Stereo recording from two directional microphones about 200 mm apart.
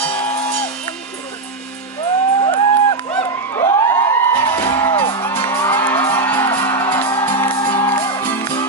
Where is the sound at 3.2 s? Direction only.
20° left (ahead or behind).